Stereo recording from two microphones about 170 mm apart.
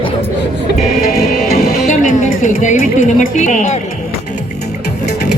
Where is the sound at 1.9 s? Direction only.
50° left (ahead or behind).